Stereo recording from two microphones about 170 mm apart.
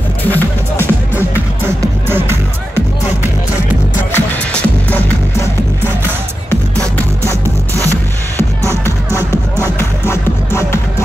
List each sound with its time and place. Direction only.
0.3 s music: 10° left (ahead or behind)
2.0 s music: 15° right (ahead or behind)
4.1 s music: 10° left (ahead or behind)
7.7 s music: 20° right (ahead or behind)
9.8 s music: 15° left (ahead or behind)